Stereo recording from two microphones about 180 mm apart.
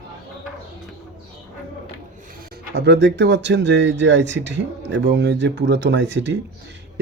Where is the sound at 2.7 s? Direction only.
70° right (ahead or behind).